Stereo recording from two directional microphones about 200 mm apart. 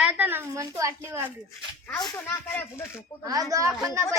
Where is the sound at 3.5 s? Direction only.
15° right (ahead or behind).